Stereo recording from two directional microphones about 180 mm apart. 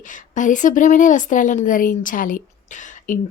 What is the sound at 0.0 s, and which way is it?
A woman's voice, 45° left (ahead or behind).